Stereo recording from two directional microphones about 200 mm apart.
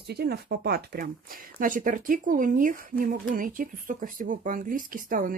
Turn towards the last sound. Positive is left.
turn(degrees=-45)  # may be behind; listen again after turning